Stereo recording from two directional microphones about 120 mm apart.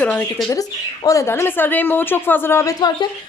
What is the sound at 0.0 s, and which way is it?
Speech, 15° left (ahead or behind).